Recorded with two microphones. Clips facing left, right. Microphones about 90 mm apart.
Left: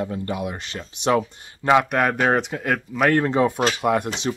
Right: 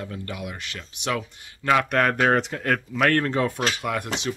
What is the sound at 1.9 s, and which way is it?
Speech, 10° left (ahead or behind).